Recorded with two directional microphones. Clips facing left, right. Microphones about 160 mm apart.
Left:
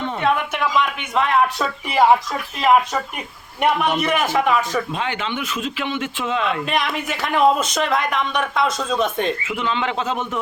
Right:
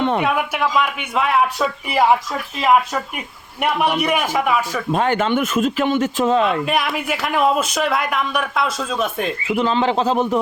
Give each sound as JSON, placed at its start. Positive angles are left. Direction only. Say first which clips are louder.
{"t": 0.2, "sound": "a man's voice", "louder": "right 1 dB", "side_deg": -10}
{"t": 4.9, "sound": "a man's voice", "louder": "right 7 dB", "side_deg": -45}
{"t": 6.7, "sound": "speech", "louder": "right 2 dB", "side_deg": -5}
{"t": 9.6, "sound": "a man's voice", "louder": "right 5 dB", "side_deg": -35}